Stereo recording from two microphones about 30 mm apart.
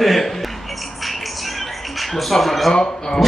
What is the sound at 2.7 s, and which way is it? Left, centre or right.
Speech, centre.